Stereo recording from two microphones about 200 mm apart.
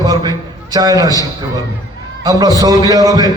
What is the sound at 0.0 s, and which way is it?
A man's voice, 20° right (ahead or behind).